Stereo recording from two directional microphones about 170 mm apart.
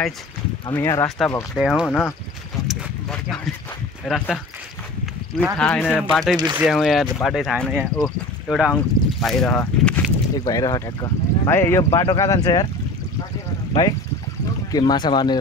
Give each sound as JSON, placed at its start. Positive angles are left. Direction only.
{"t": 0.7, "sound": "speech", "side_deg": 15}
{"t": 1.5, "sound": "speech", "side_deg": 0}
{"t": 2.7, "sound": "a sound", "side_deg": 0}
{"t": 4.0, "sound": "speech", "side_deg": 0}
{"t": 5.6, "sound": "speech", "side_deg": 5}
{"t": 10.3, "sound": "speech", "side_deg": 20}
{"t": 13.8, "sound": "speech", "side_deg": 20}